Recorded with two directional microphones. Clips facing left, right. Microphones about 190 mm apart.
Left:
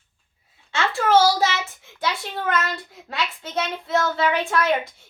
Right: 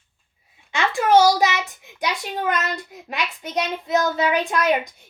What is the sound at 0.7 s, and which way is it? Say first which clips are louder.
A child's voice: right 2 dB; 15° right (ahead or behind).